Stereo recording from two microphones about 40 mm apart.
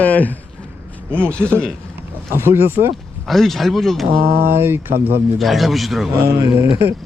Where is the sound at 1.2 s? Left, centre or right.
Left.